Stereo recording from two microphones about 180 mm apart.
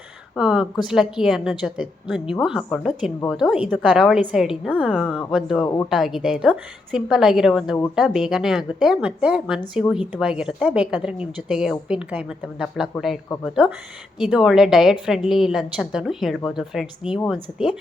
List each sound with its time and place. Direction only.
0.3 s speech: 5° right (ahead or behind)
5.6 s speech: 20° left (ahead or behind)
5.9 s speech: centre (ahead or behind)